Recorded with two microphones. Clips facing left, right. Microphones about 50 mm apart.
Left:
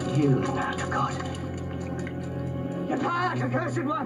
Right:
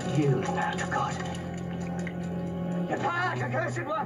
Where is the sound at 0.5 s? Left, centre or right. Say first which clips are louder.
Left 1 dB; centre.